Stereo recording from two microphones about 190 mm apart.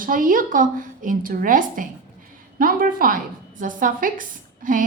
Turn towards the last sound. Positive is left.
turn(degrees=-45)  # may be behind; listen again after turning